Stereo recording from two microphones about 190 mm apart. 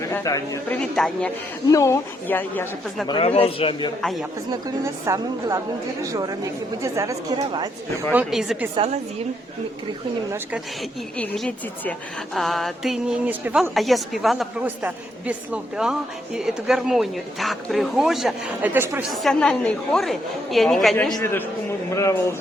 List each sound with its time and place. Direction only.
0.1 s speech: 15° left (ahead or behind)
0.8 s speech: 5° left (ahead or behind)
1.6 s speech: 15° left (ahead or behind)
3.1 s a man's voice: 30° left (ahead or behind)
4.0 s speech: centre (ahead or behind)
4.5 s a woman's voice: 15° right (ahead or behind)
8.1 s speech: 5° right (ahead or behind)
11.2 s speech: 5° left (ahead or behind); by 19.0 s 10° right (ahead or behind)
19.1 s speech: centre (ahead or behind)